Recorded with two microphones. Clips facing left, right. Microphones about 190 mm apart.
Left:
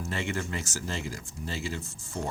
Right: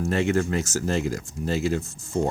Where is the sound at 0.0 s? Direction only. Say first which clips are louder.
Right 10 dB; 45° right (ahead or behind).